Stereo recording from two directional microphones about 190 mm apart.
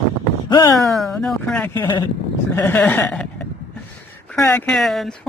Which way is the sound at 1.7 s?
20° left (ahead or behind).